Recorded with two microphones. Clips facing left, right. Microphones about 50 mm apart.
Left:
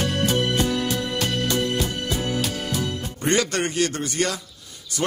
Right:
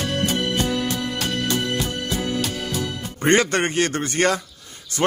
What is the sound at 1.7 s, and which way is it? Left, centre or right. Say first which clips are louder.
Music: even; centre.